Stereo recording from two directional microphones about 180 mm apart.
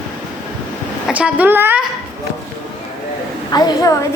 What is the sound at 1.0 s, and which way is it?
Speech, 5° right (ahead or behind).